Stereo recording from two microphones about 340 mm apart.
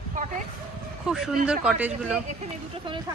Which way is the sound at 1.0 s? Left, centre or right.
Centre.